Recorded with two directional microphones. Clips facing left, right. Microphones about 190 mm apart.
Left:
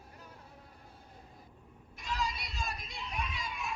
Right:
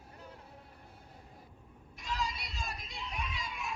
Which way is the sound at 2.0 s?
60° left (ahead or behind).